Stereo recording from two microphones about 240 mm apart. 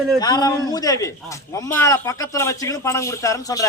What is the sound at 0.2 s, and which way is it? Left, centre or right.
A man's voice, centre.